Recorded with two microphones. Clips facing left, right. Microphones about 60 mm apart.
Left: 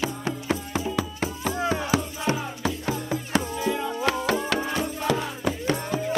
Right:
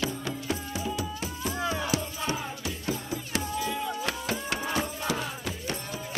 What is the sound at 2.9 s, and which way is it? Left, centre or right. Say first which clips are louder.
Music: left 4 dB; left.